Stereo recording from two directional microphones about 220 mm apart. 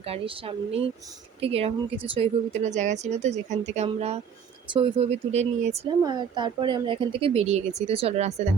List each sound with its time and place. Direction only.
0.0 s speech: 25° right (ahead or behind)
6.0 s speech: 20° right (ahead or behind)